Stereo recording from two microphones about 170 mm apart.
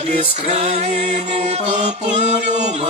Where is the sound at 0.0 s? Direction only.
35° right (ahead or behind).